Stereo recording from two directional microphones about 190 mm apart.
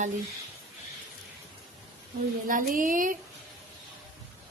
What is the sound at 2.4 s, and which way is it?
Speech, 45° right (ahead or behind).